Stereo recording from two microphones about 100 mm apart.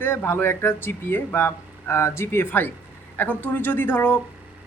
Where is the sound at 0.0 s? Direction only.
25° left (ahead or behind).